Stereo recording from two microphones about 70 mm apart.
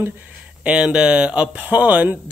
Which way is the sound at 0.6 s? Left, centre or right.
Centre.